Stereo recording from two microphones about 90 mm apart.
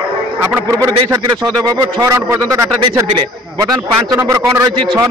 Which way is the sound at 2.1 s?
30° right (ahead or behind).